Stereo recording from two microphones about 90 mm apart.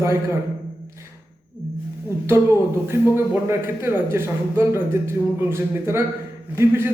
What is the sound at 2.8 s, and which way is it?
A man's voice, 30° right (ahead or behind).